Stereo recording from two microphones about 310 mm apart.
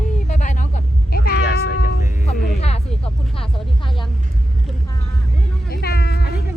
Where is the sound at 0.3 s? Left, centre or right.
Left.